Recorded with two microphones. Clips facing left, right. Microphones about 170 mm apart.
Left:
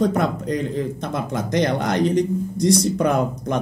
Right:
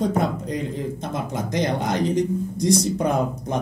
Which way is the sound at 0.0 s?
70° left (ahead or behind).